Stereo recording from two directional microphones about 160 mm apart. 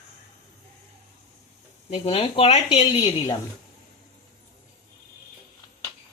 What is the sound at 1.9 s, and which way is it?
A woman's voice, 35° left (ahead or behind).